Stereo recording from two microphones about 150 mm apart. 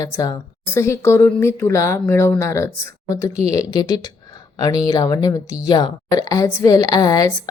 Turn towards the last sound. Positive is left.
turn(degrees=25)  # may be behind; listen again after turning